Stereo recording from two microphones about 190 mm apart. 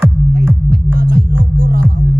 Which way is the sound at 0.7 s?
50° right (ahead or behind).